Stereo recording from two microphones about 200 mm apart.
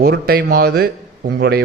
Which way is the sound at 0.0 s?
55° right (ahead or behind).